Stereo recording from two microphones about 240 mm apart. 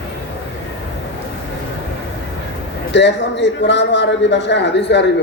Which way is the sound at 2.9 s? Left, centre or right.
Left.